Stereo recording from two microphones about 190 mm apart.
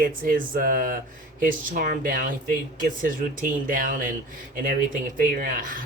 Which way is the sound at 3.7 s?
45° right (ahead or behind).